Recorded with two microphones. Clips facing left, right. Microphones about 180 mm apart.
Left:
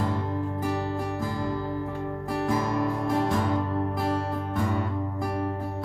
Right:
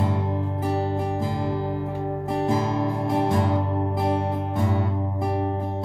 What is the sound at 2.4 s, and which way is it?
Music, 25° right (ahead or behind).